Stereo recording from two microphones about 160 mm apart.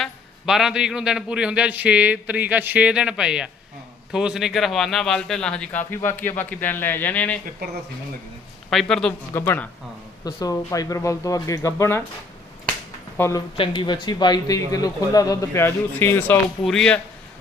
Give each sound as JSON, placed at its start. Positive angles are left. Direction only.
{"t": 0.0, "sound": "a man's voice", "side_deg": 0}
{"t": 8.7, "sound": "a man's voice", "side_deg": 5}
{"t": 9.3, "sound": "a man's voice", "side_deg": 15}
{"t": 13.1, "sound": "speech", "side_deg": 15}
{"t": 13.6, "sound": "a man's voice", "side_deg": 30}